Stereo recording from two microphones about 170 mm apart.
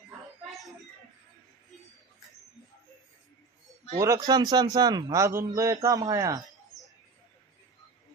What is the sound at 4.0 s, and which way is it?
Speech, 20° right (ahead or behind).